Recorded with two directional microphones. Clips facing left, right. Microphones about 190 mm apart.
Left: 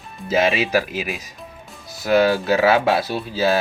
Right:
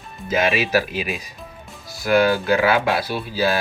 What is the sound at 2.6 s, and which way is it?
Speech, 25° left (ahead or behind).